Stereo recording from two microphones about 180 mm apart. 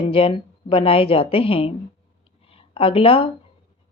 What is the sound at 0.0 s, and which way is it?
A woman's voice, 30° left (ahead or behind).